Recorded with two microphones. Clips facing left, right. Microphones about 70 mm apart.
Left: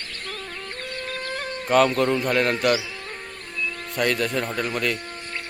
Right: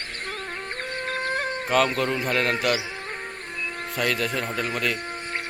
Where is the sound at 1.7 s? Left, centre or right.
Centre.